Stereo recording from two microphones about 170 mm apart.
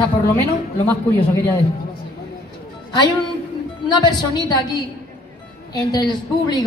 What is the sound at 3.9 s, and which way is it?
A woman's voice, 25° left (ahead or behind).